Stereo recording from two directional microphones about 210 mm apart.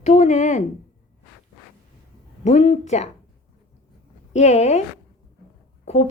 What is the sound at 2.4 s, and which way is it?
Speech, 30° left (ahead or behind).